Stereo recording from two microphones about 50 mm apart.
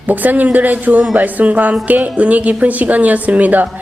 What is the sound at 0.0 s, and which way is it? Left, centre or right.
A woman's voice, right.